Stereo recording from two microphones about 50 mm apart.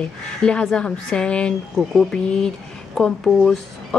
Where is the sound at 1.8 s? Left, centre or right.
Centre.